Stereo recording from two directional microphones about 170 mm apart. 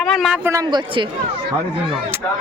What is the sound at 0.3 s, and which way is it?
Speech, 15° right (ahead or behind).